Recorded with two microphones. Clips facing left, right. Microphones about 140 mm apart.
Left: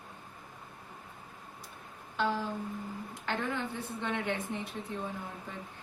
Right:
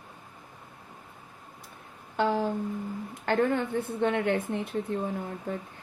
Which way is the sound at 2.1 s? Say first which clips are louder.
Right 6 dB; 55° right (ahead or behind).